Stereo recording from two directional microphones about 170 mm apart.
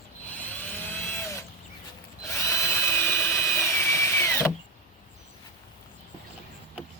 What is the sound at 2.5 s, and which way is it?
Drill, 15° left (ahead or behind).